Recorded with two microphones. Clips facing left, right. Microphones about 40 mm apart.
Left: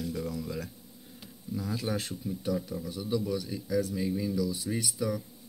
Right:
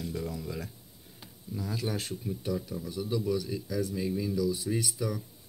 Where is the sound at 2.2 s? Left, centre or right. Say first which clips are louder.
Even; right.